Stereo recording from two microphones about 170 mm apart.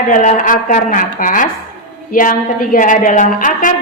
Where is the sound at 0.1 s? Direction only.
50° left (ahead or behind).